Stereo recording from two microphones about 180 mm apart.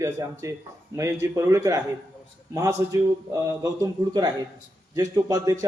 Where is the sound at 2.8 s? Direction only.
15° right (ahead or behind).